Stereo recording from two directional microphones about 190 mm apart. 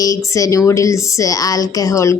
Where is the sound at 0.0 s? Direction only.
15° left (ahead or behind).